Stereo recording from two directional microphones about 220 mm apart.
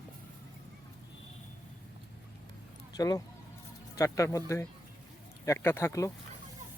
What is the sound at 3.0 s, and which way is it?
Speech, 15° left (ahead or behind).